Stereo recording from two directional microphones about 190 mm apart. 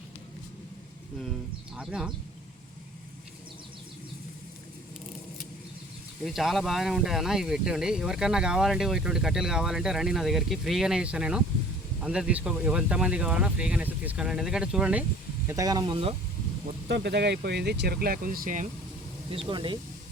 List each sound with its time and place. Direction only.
1.7 s speech: 5° right (ahead or behind)
6.2 s speech: centre (ahead or behind)
15.4 s speech: 20° right (ahead or behind)
16.9 s speech: 65° right (ahead or behind); by 18.7 s 45° right (ahead or behind)
19.3 s speech: 25° right (ahead or behind)